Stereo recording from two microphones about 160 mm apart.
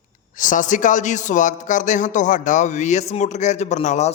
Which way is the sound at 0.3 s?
55° left (ahead or behind).